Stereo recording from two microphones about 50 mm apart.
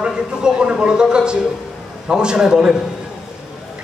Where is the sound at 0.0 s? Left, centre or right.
Centre.